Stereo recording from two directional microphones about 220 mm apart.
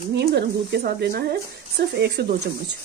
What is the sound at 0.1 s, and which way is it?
Speech, 50° right (ahead or behind).